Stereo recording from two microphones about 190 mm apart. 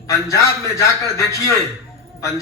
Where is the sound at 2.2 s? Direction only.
15° left (ahead or behind).